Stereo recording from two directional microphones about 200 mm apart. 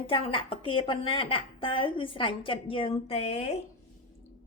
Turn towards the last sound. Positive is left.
turn(degrees=30)  # may be behind; listen again after turning